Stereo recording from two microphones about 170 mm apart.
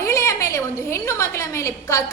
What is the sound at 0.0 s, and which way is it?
A woman's voice, 15° left (ahead or behind).